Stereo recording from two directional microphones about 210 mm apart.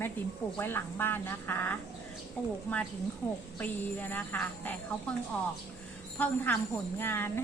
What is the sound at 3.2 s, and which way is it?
A woman's voice, 5° left (ahead or behind).